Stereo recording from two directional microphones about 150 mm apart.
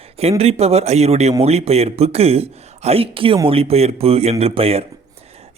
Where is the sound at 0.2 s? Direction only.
45° right (ahead or behind).